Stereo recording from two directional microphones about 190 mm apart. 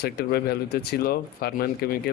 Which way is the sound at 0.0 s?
55° left (ahead or behind).